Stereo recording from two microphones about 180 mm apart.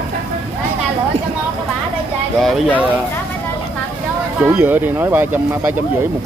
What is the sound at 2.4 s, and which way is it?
Speech, centre (ahead or behind).